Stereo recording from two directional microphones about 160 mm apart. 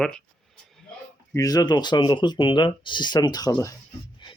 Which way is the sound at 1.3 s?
20° left (ahead or behind).